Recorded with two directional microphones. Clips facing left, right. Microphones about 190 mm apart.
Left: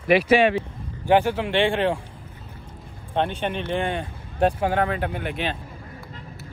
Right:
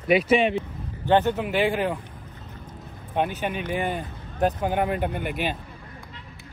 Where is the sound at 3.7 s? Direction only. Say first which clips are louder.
Left 2 dB; 5° right (ahead or behind).